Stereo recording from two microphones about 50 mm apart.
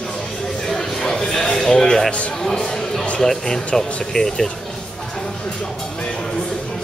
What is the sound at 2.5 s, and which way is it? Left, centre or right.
Music, centre.